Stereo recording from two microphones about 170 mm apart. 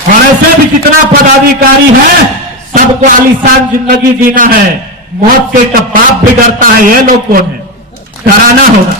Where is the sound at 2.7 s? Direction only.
50° right (ahead or behind).